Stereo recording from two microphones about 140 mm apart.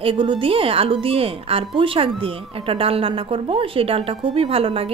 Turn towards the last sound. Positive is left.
turn(degrees=-40)  # may be behind; listen again after turning